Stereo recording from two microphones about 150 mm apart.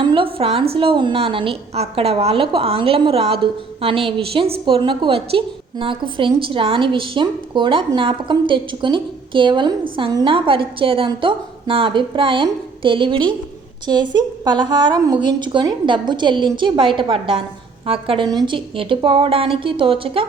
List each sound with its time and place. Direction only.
0.0 s a woman's voice: 35° right (ahead or behind)